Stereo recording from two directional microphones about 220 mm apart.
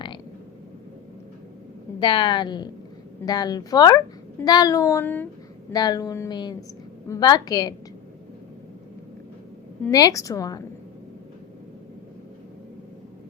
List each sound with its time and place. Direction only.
2.0 s a woman's voice: 20° left (ahead or behind)
9.8 s a child's voice: 15° left (ahead or behind)